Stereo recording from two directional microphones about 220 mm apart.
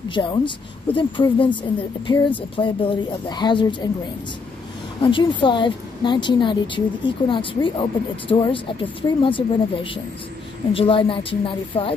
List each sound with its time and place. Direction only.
0.1 s speech: 20° left (ahead or behind)
5.0 s speech: 20° left (ahead or behind)